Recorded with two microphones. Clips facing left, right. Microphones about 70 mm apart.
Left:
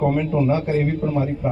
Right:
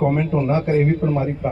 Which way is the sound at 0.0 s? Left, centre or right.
Right.